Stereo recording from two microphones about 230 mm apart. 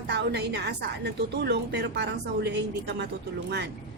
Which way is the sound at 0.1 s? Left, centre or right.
Right.